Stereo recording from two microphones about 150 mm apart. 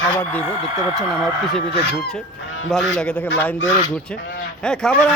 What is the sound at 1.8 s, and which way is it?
Fowl, 90° left.